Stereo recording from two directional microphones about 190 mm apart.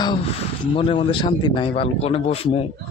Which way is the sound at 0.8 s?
25° left (ahead or behind).